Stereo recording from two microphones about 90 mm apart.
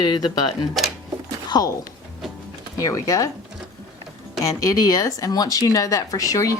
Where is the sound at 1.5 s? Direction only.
45° left (ahead or behind).